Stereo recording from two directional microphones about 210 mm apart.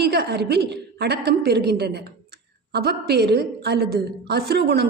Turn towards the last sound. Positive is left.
turn(degrees=-50)  # may be behind; listen again after turning